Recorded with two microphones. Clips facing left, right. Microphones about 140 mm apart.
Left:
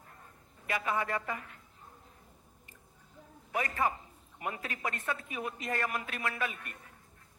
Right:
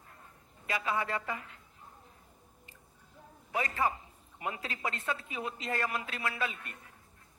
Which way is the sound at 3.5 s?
20° right (ahead or behind).